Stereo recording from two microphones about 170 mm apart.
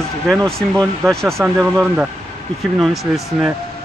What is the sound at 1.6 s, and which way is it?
A man's voice, centre (ahead or behind).